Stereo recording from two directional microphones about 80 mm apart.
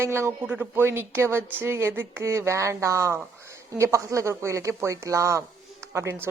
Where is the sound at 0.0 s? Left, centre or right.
Right.